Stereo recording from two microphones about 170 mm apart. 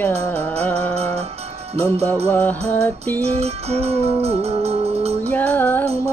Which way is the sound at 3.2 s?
35° right (ahead or behind).